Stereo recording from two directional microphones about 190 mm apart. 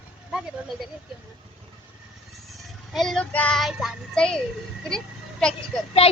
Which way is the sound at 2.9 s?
Centre (ahead or behind).